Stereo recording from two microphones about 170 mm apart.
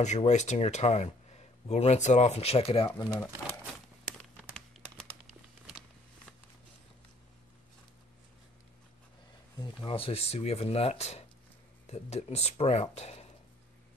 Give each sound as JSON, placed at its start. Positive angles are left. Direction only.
{"t": 0.0, "sound": "speech", "side_deg": 40}
{"t": 4.2, "sound": "crumpling", "side_deg": 5}
{"t": 9.8, "sound": "speech", "side_deg": 35}